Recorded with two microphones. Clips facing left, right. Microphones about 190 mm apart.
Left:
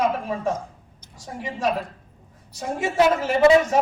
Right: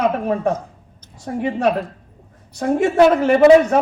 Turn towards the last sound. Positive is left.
turn(degrees=-60)  # may be behind; listen again after turning